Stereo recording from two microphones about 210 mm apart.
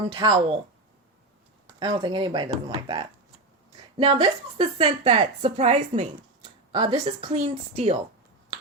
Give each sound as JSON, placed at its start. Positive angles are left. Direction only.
{"t": 0.1, "sound": "a woman's voice", "side_deg": -25}
{"t": 1.8, "sound": "a woman's voice", "side_deg": -20}